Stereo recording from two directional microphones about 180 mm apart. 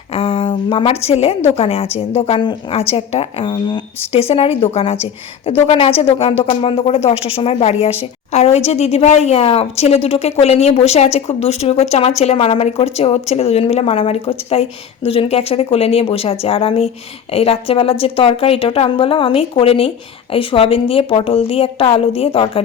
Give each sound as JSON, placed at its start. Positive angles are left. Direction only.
{"t": 0.1, "sound": "speech", "side_deg": 30}